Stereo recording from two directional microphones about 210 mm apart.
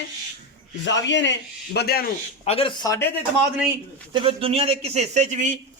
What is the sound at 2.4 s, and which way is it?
Speech, 25° left (ahead or behind).